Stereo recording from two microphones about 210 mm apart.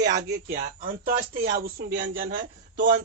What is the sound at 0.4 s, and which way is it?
Speech, 45° right (ahead or behind).